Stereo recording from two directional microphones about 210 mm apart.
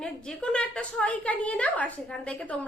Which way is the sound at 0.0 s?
5° left (ahead or behind).